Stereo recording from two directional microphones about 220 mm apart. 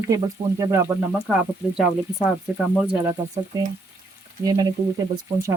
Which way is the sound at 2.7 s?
Centre (ahead or behind).